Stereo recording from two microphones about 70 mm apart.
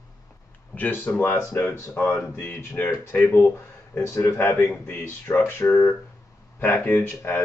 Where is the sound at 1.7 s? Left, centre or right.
Left.